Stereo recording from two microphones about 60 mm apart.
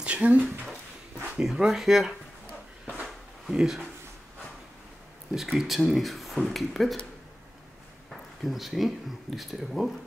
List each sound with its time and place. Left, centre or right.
0.0 s speech: right
1.4 s speech: centre
3.4 s speech: centre
5.3 s speech: centre
8.1 s speech: centre